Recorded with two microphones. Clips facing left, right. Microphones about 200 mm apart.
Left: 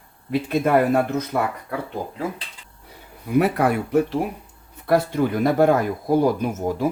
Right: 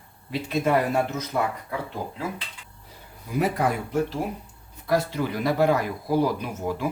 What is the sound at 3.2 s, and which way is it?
Speech, 65° left (ahead or behind).